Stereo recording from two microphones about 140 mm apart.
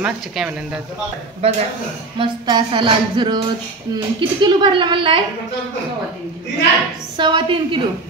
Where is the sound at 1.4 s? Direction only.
45° right (ahead or behind).